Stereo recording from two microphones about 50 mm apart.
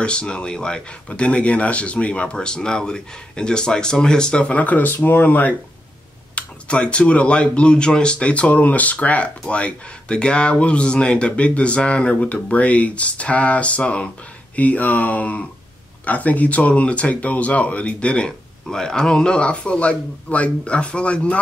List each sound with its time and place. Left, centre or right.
0.0 s speech: left
4.5 s speech: left
6.3 s speech: left